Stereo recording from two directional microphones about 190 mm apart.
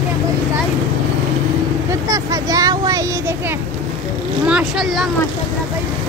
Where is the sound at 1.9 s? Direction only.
20° right (ahead or behind).